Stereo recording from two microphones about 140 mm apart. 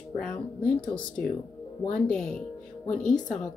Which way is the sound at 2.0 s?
5° left (ahead or behind).